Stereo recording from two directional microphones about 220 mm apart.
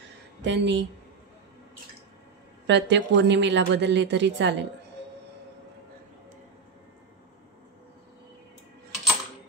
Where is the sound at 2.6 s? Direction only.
55° right (ahead or behind).